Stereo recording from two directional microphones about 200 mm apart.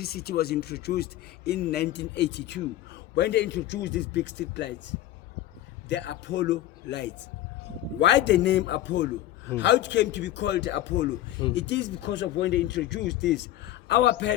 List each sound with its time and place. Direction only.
0.0 s speech: 50° left (ahead or behind)
5.9 s speech: 60° left (ahead or behind)